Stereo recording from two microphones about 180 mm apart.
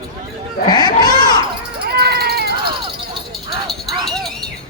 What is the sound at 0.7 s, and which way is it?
Goat, 25° left (ahead or behind).